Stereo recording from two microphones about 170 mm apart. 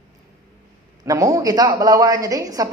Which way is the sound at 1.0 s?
20° right (ahead or behind).